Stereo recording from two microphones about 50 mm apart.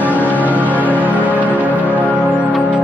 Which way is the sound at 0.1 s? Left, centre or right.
Left.